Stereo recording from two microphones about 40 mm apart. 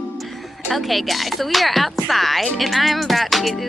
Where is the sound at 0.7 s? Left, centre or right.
Centre.